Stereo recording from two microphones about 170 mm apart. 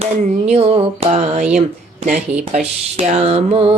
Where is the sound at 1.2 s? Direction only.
50° right (ahead or behind).